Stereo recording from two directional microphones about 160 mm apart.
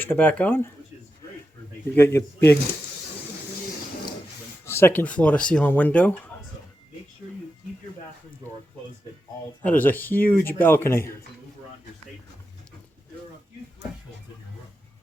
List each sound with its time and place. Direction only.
0.0 s speech: 10° left (ahead or behind)
2.0 s speech: 15° left (ahead or behind)
4.6 s speech: 15° left (ahead or behind)
9.6 s speech: 10° left (ahead or behind)